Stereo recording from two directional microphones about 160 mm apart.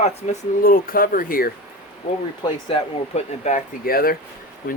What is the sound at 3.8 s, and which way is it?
Speech, 70° left (ahead or behind).